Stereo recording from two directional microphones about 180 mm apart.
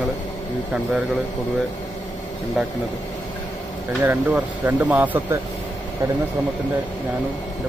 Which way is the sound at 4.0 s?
10° right (ahead or behind).